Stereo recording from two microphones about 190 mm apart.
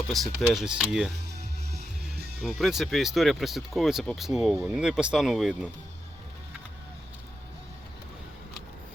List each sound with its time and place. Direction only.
0.1 s speech: centre (ahead or behind)
1.4 s music: 60° right (ahead or behind)
2.4 s speech: centre (ahead or behind)